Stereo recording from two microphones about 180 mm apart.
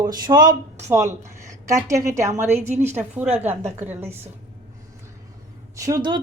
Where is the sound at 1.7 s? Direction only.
15° right (ahead or behind).